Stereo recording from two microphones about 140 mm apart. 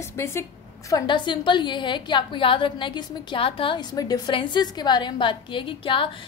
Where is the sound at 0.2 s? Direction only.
20° left (ahead or behind).